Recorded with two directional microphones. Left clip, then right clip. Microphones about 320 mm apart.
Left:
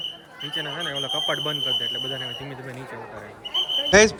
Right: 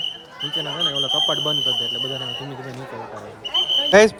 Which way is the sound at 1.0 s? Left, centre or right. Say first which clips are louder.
Right 4 dB; centre.